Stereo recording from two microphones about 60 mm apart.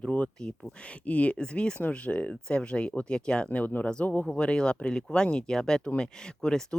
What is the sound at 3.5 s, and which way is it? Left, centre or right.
Speech, left.